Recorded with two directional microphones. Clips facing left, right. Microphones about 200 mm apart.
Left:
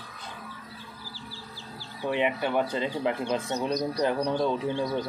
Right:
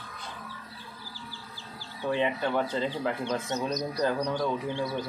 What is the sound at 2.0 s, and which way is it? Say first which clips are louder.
Speech: left 1 dB; 15° left (ahead or behind).